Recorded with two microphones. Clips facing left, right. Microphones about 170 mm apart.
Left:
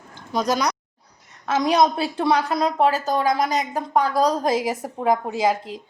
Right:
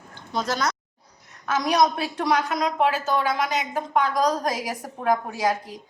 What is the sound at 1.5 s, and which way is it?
A woman's voice, 25° left (ahead or behind).